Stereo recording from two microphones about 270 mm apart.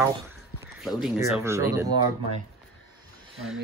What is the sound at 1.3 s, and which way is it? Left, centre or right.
Speech, centre.